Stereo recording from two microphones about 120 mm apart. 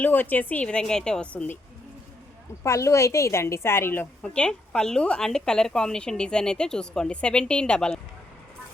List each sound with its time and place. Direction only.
0.0 s a woman's voice: 15° left (ahead or behind)
2.6 s a woman's voice: 25° left (ahead or behind)
4.2 s a woman's voice: 10° left (ahead or behind)